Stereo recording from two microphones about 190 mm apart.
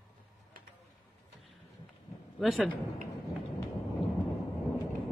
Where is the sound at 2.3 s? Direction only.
Centre (ahead or behind).